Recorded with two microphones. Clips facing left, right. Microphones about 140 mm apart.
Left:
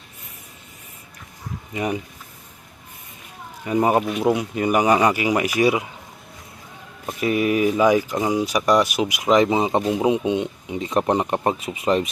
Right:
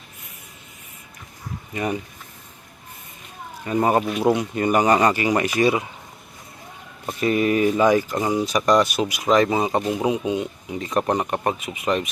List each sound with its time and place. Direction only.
1.7 s speech: 15° left (ahead or behind)
3.7 s speech: 10° left (ahead or behind)
4.1 s speech: centre (ahead or behind)
7.2 s speech: 5° left (ahead or behind); by 12.0 s 30° left (ahead or behind)